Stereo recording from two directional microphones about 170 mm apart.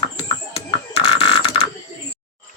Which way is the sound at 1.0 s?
30° left (ahead or behind).